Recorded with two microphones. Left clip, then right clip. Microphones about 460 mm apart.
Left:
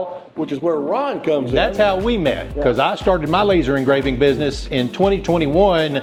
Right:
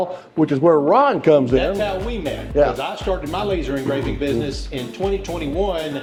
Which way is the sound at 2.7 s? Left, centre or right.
Left.